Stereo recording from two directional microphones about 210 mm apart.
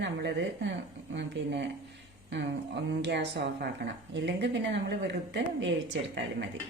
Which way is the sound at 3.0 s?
55° right (ahead or behind).